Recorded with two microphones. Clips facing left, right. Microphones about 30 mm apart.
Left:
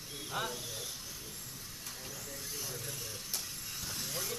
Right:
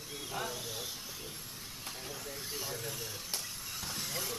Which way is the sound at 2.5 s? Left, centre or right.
Right.